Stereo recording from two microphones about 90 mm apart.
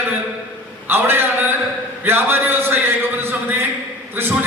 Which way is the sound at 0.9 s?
25° right (ahead or behind).